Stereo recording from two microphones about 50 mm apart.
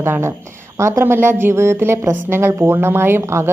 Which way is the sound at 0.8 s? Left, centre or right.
Right.